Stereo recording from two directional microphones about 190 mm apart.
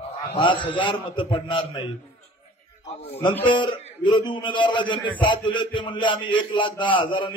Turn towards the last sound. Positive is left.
turn(degrees=25)  # may be behind; listen again after turning